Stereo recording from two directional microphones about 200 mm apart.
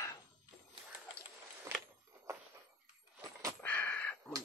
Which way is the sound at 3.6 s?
10° left (ahead or behind).